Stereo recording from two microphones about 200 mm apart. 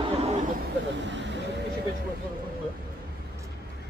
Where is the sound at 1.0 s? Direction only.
65° right (ahead or behind).